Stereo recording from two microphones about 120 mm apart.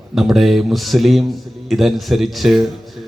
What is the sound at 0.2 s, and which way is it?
A man's voice, centre (ahead or behind).